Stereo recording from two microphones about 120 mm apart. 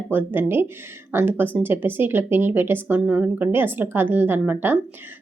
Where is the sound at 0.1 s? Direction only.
15° right (ahead or behind).